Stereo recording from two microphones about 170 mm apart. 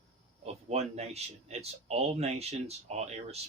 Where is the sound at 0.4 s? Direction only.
40° right (ahead or behind).